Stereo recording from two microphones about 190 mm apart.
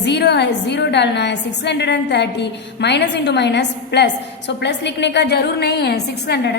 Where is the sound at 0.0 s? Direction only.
65° left (ahead or behind).